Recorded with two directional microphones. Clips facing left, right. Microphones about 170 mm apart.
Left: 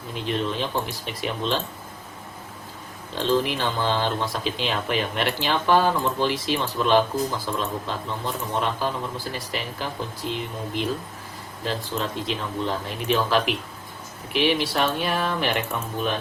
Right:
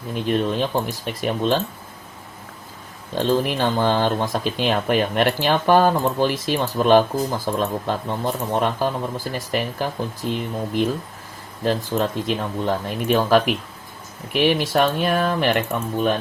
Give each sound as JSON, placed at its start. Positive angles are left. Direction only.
{"t": 0.1, "sound": "speech", "side_deg": -50}
{"t": 3.2, "sound": "speech", "side_deg": -50}